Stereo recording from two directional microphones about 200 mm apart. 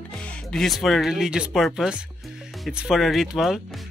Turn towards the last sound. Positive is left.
turn(degrees=0)  # may be behind; listen again after turning